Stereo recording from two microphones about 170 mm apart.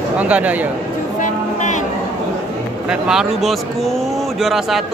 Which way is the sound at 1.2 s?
45° left (ahead or behind).